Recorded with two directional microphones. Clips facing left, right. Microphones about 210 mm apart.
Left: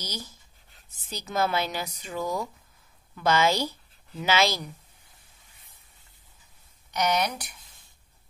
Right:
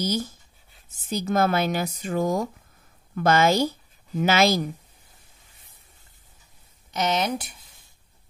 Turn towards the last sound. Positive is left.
turn(degrees=-25)  # may be behind; listen again after turning